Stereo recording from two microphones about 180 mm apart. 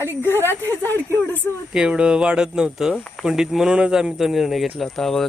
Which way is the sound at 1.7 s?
5° right (ahead or behind).